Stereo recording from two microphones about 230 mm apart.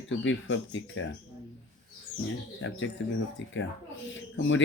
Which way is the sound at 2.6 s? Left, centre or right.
Left.